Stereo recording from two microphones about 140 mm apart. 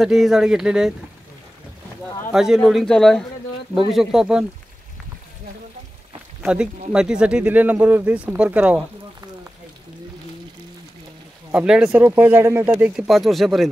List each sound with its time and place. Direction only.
0.0 s speech: centre (ahead or behind)
2.3 s speech: 5° right (ahead or behind)
6.4 s speech: 5° right (ahead or behind)
11.5 s speech: 5° right (ahead or behind)
12.4 s speech: 20° right (ahead or behind)
12.6 s speech: 10° right (ahead or behind)